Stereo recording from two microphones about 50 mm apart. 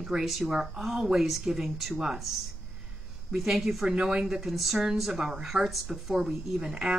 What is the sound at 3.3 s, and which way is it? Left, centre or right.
Speech, centre.